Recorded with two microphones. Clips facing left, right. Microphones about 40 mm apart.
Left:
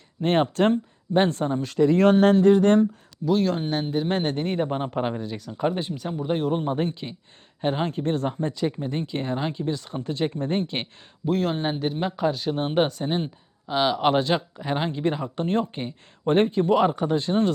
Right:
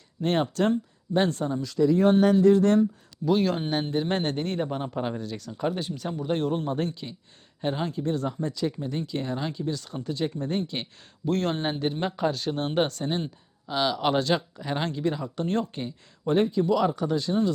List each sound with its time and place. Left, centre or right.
0.2 s speech: left
2.0 s speech: left
2.2 s a sound: left
2.5 s speech: left
3.2 s speech: centre
3.8 s speech: centre
4.4 s speech: centre
6.5 s speech: left
7.9 s speech: left
11.3 s speech: centre
15.0 s speech: left